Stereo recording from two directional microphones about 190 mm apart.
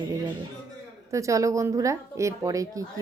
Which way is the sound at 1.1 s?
15° right (ahead or behind).